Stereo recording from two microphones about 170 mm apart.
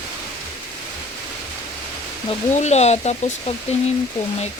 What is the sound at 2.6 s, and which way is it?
Speech, 40° left (ahead or behind).